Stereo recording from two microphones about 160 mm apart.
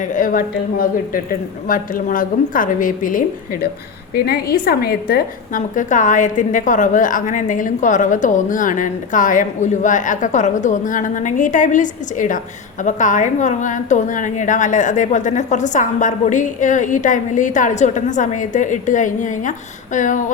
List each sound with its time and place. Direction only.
0.0 s a woman's voice: 55° left (ahead or behind)
4.1 s a woman's voice: 70° left (ahead or behind); by 20.3 s 50° left (ahead or behind)